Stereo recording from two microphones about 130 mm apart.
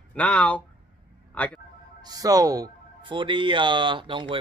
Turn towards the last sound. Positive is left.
turn(degrees=-40)  # may be behind; listen again after turning